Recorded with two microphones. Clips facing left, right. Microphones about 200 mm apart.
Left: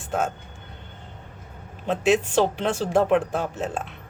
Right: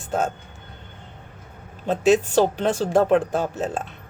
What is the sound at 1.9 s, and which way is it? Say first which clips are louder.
Speech: right 3 dB; 40° right (ahead or behind).